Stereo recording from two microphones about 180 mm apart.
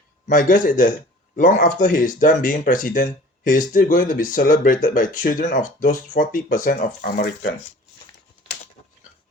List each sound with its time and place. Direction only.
0.3 s speech: 45° left (ahead or behind)